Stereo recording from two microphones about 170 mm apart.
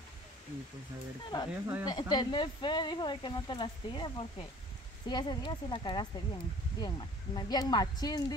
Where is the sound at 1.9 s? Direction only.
25° left (ahead or behind).